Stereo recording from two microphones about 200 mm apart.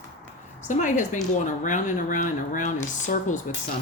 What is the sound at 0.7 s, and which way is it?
Speech, 40° left (ahead or behind).